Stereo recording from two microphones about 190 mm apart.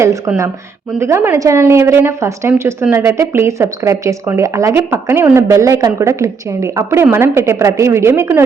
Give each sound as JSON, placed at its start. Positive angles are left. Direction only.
{"t": 0.0, "sound": "a woman's voice", "side_deg": -15}